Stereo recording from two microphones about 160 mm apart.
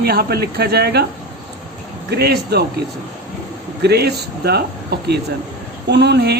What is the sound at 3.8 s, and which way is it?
Speech, 90° right.